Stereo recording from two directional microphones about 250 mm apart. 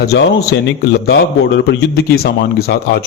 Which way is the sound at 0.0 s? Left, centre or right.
Left.